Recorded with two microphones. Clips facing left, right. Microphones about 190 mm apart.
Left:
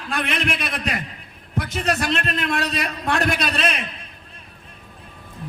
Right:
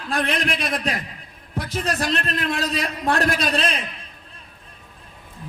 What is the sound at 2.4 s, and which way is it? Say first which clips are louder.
Speech: even; 65° left (ahead or behind).